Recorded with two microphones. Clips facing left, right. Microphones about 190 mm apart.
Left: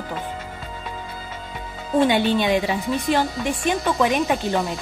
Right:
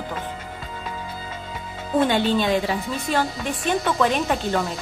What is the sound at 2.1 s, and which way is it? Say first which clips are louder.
Speech: left 1 dB; 15° left (ahead or behind).